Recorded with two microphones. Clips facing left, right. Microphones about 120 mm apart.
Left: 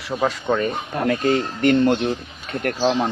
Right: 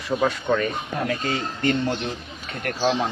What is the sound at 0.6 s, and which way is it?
Speech, 45° left (ahead or behind).